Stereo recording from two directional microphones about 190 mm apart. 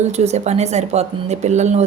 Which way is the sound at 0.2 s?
35° right (ahead or behind).